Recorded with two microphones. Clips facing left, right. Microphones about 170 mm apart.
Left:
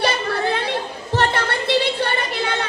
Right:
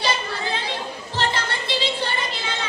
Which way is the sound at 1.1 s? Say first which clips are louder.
Left 6 dB; 60° left (ahead or behind).